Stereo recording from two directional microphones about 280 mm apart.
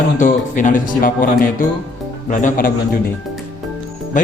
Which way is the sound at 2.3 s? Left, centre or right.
Left.